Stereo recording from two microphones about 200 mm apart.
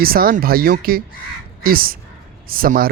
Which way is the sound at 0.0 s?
45° right (ahead or behind).